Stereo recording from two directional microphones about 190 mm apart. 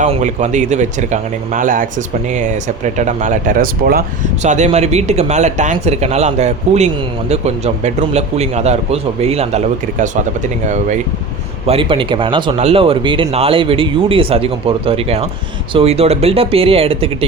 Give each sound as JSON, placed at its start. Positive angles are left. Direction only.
{"t": 0.0, "sound": "speech", "side_deg": -35}
{"t": 4.4, "sound": "speech", "side_deg": -35}
{"t": 11.6, "sound": "speech", "side_deg": -30}